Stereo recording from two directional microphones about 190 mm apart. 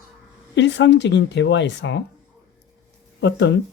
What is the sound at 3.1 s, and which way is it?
Speech, 65° left (ahead or behind).